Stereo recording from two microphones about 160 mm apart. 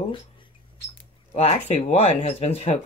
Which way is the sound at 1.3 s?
40° left (ahead or behind).